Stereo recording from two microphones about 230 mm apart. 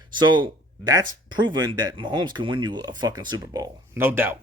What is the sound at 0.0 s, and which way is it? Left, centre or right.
Speech, centre.